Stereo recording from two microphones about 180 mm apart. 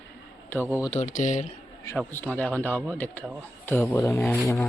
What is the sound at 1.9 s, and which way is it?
Speech, 10° left (ahead or behind).